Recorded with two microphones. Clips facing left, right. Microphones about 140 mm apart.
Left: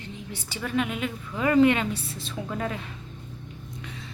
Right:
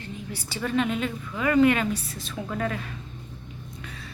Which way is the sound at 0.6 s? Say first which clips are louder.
Right 2 dB; 10° left (ahead or behind).